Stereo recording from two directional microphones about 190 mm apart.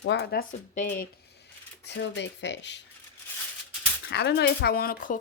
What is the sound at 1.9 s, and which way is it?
Speech, 65° left (ahead or behind).